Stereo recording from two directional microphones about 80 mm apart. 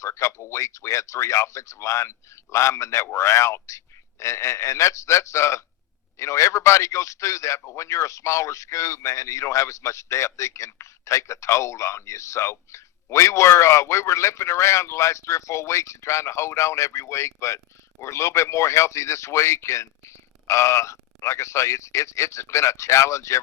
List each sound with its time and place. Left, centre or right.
0.0 s speech: left